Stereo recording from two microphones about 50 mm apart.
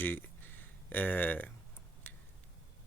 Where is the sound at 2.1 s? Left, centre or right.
Left.